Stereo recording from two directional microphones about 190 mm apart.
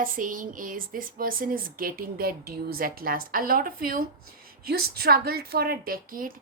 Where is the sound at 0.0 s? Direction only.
45° right (ahead or behind).